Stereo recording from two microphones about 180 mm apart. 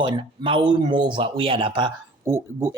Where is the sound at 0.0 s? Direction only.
30° right (ahead or behind).